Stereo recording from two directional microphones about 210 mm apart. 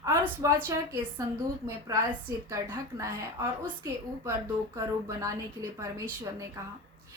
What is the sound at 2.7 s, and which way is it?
A woman's voice, 15° right (ahead or behind).